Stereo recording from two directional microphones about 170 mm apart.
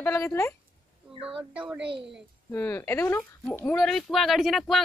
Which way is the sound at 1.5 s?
5° right (ahead or behind).